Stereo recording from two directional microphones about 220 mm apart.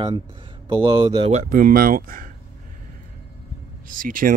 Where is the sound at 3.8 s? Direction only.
40° right (ahead or behind).